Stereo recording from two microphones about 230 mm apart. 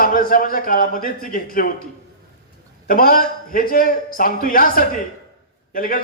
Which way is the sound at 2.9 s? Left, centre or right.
Left.